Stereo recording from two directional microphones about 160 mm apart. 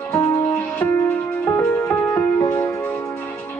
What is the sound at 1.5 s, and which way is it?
Music, 15° left (ahead or behind).